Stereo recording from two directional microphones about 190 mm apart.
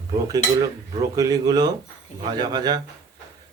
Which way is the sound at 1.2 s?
20° right (ahead or behind).